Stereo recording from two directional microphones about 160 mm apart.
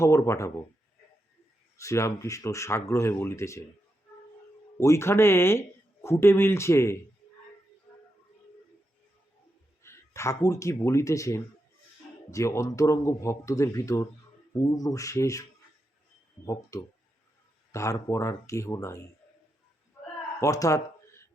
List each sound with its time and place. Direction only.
0.0 s speech: 20° left (ahead or behind)
1.8 s speech: 20° left (ahead or behind)
4.8 s speech: 15° left (ahead or behind)
9.8 s speech: 15° left (ahead or behind)
16.5 s speech: 20° left (ahead or behind)
20.4 s a sound: 20° left (ahead or behind)